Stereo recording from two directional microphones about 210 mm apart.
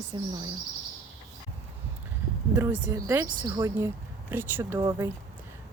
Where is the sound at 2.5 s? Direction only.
10° right (ahead or behind).